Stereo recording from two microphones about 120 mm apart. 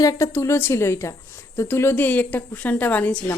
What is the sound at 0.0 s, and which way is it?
A woman's voice, 25° left (ahead or behind).